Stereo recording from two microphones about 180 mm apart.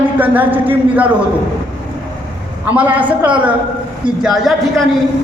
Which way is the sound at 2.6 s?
10° right (ahead or behind).